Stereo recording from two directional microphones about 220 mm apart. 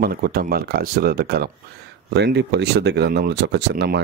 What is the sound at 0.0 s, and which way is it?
Speech, 45° right (ahead or behind).